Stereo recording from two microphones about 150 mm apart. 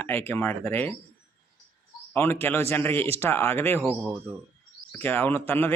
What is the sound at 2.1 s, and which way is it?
Speech, 15° left (ahead or behind).